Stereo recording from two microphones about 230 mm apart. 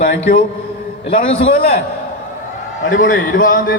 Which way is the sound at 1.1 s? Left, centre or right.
Left.